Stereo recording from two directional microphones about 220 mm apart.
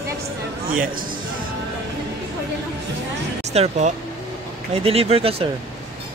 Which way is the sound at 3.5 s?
30° right (ahead or behind).